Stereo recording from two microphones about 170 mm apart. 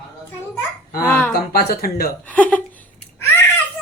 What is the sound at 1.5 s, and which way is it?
Speech, 65° left (ahead or behind).